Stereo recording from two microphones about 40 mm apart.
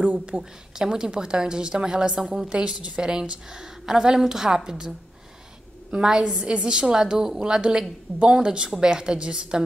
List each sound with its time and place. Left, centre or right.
0.0 s a woman's voice: right
0.4 s a woman's voice: centre
2.5 s a woman's voice: right